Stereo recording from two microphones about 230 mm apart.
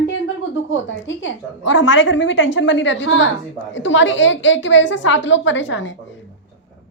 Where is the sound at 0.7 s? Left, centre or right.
Left.